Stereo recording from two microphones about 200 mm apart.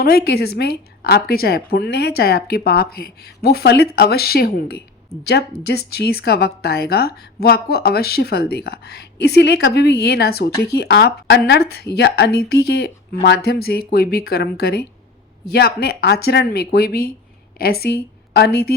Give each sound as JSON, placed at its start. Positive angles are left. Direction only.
{"t": 0.0, "sound": "a woman's voice", "side_deg": 50}